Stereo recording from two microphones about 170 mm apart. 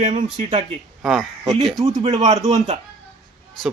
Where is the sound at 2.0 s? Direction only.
25° right (ahead or behind).